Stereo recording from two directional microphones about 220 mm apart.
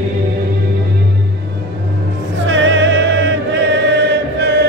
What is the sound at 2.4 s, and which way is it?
Chant, 55° right (ahead or behind).